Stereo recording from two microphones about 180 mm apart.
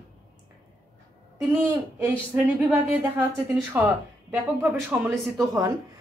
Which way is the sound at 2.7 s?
10° right (ahead or behind).